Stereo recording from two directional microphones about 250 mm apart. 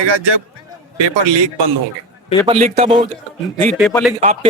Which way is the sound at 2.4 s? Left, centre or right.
Right.